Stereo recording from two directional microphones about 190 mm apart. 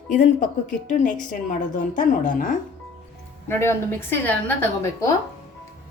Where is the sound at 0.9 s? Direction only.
40° left (ahead or behind).